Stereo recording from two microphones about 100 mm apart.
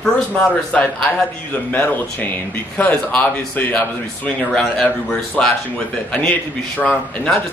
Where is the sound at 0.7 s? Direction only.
10° left (ahead or behind).